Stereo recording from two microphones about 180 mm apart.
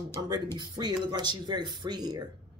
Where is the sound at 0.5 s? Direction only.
25° right (ahead or behind).